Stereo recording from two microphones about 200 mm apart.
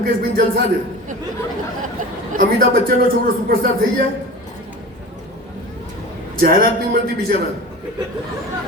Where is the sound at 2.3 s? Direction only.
50° right (ahead or behind).